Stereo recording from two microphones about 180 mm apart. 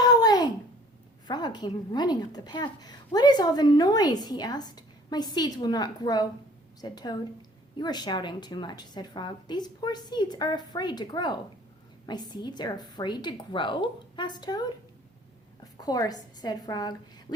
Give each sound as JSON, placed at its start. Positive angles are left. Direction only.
{"t": 0.0, "sound": "a sound", "side_deg": 20}
{"t": 1.3, "sound": "a woman's voice", "side_deg": 25}
{"t": 15.8, "sound": "a woman's voice", "side_deg": 20}